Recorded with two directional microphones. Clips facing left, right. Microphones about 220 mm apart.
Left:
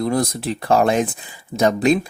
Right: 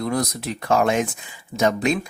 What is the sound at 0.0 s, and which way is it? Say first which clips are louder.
Speech: left 4 dB; 30° left (ahead or behind).